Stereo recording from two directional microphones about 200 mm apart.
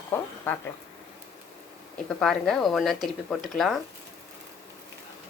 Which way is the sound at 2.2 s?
5° left (ahead or behind).